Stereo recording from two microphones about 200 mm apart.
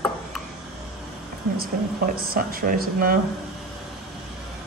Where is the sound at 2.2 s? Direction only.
45° right (ahead or behind).